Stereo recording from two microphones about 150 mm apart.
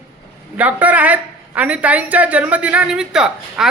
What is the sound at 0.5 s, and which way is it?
A woman's voice, 10° right (ahead or behind).